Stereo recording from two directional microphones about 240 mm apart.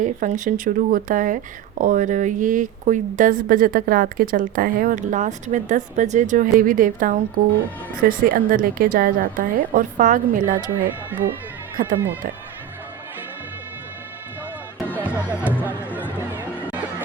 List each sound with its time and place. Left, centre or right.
0.0 s speech: right
10.8 s speech: centre
11.8 s speech: right
15.0 s music: centre
15.9 s a sound: centre